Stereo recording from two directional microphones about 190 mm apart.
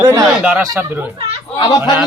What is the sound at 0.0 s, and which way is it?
Speech, 10° right (ahead or behind).